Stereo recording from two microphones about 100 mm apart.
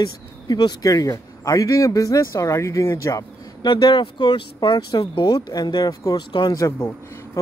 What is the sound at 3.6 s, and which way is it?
Speech, 55° left (ahead or behind).